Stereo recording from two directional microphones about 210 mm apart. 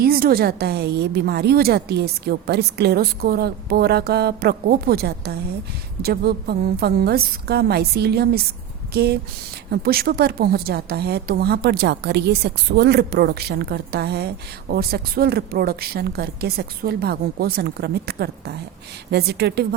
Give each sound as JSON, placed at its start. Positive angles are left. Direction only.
{"t": 0.0, "sound": "a woman's voice", "side_deg": -45}